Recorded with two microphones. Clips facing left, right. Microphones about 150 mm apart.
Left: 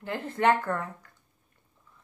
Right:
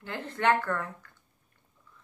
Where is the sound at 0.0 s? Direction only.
30° left (ahead or behind).